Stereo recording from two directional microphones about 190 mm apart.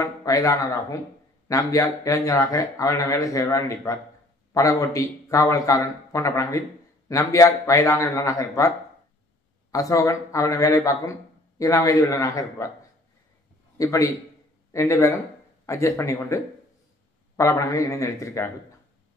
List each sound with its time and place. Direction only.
0.0 s speech: 15° left (ahead or behind)
13.7 s speech: 15° left (ahead or behind)
17.4 s speech: 15° left (ahead or behind)